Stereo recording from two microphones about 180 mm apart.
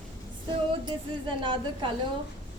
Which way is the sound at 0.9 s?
25° right (ahead or behind).